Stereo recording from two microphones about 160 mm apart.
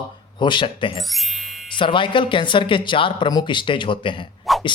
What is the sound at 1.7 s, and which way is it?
Speech, 30° left (ahead or behind).